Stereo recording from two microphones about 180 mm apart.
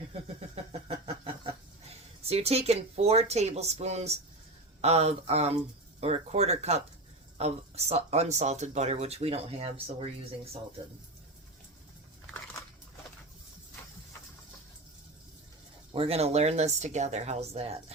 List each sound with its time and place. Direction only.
0.1 s a sound: 35° right (ahead or behind)
2.2 s speech: 35° right (ahead or behind)
15.9 s speech: 35° right (ahead or behind)